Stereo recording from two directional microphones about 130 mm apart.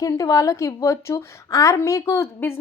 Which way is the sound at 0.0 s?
25° left (ahead or behind).